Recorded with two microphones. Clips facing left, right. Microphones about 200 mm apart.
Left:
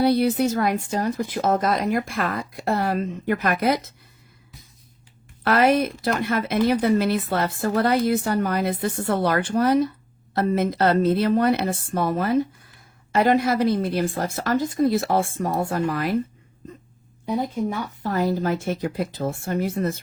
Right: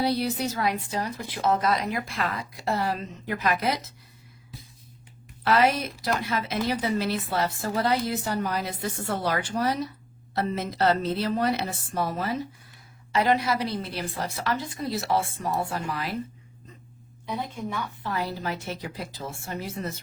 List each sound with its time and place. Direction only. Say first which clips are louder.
0.0 s speech: left 7 dB; 55° left (ahead or behind)
5.4 s speech: left 4 dB; 55° left (ahead or behind)
17.2 s speech: left 8 dB; 40° left (ahead or behind)